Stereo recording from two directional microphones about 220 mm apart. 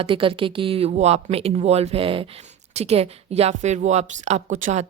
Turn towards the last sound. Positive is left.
turn(degrees=-30)  # may be behind; listen again after turning